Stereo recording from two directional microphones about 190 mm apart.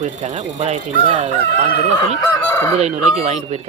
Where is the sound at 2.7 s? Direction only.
35° right (ahead or behind).